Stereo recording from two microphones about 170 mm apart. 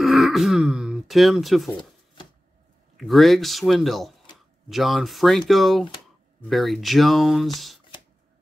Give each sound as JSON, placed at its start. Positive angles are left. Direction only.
{"t": 0.0, "sound": "throat clearing", "side_deg": 0}
{"t": 3.0, "sound": "speech", "side_deg": 0}